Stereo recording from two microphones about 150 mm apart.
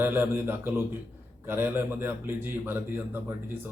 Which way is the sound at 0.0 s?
15° right (ahead or behind).